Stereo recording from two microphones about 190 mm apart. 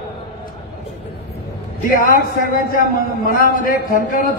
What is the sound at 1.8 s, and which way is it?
A man's voice, 50° left (ahead or behind).